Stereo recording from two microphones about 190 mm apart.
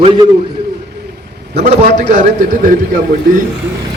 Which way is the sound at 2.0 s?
40° right (ahead or behind).